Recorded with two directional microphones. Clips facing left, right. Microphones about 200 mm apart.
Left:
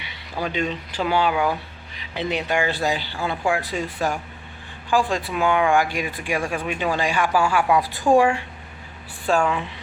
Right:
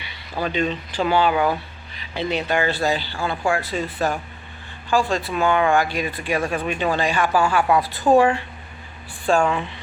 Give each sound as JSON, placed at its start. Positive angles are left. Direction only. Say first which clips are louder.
{"t": 0.4, "sound": "speech", "louder": "right 2 dB", "side_deg": 10}